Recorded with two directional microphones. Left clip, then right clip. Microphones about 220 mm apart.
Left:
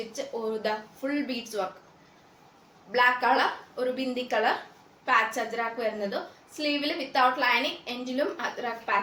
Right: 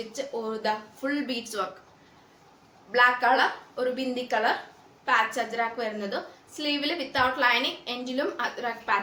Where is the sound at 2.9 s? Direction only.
15° right (ahead or behind).